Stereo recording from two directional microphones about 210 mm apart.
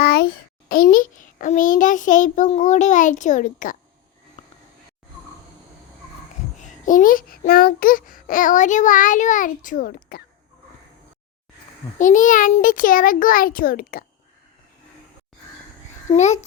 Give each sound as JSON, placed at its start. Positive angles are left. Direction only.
{"t": 0.0, "sound": "a child's voice", "side_deg": 45}
{"t": 6.6, "sound": "a child's voice", "side_deg": 35}
{"t": 11.9, "sound": "a child's voice", "side_deg": 40}
{"t": 16.1, "sound": "a child's voice", "side_deg": 35}